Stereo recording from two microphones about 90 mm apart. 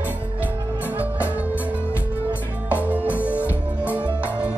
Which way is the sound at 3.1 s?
25° left (ahead or behind).